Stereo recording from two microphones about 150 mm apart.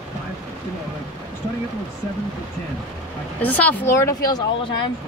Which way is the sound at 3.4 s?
10° left (ahead or behind).